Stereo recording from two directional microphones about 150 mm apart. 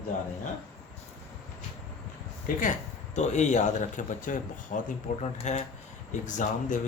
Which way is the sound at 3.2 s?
50° left (ahead or behind).